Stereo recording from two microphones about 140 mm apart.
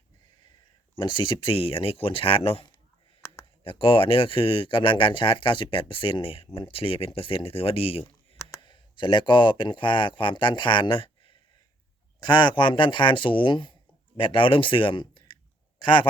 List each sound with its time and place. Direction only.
0.9 s speech: 35° left (ahead or behind)
8.4 s a sound: 20° left (ahead or behind)
8.6 s speech: 35° left (ahead or behind)
12.2 s speech: 35° left (ahead or behind)